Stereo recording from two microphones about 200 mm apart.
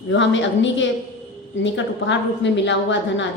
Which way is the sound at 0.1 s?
65° left (ahead or behind).